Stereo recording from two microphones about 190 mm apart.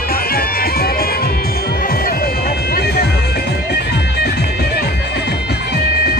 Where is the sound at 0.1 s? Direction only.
50° left (ahead or behind).